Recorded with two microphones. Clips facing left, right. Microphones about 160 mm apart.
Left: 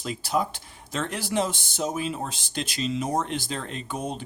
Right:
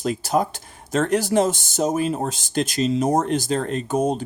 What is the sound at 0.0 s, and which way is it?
Speech, 45° right (ahead or behind).